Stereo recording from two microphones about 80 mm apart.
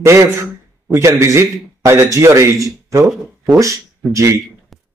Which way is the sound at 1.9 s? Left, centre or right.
Right.